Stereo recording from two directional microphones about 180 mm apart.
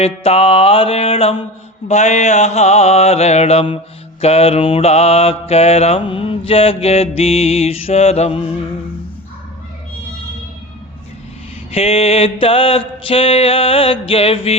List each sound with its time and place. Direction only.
0.0 s mantra: 35° left (ahead or behind)
11.7 s mantra: 35° left (ahead or behind)